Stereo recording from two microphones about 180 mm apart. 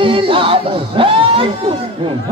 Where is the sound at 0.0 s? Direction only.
30° right (ahead or behind).